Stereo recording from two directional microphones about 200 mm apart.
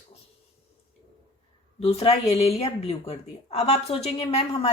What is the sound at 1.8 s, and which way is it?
Speech, 30° left (ahead or behind).